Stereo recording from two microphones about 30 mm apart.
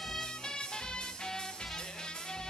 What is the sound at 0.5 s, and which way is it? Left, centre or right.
Music, left.